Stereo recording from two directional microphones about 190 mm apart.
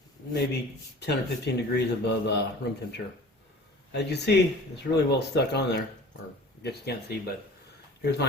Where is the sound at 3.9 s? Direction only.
60° left (ahead or behind).